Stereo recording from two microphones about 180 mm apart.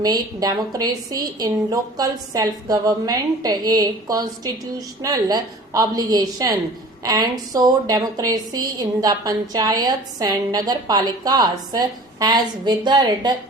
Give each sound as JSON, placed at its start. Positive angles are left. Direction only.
{"t": 0.0, "sound": "a woman's voice", "side_deg": -20}